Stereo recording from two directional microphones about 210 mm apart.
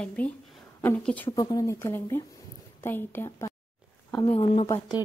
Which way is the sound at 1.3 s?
20° left (ahead or behind).